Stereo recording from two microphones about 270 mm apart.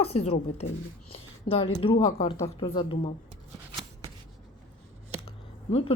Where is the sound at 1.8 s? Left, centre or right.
Centre.